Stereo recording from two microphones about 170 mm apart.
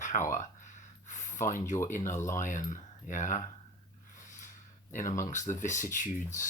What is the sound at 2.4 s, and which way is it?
Speech, 45° left (ahead or behind).